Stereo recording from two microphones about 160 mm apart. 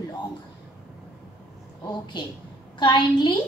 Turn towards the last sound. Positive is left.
turn(degrees=30)  # may be behind; listen again after turning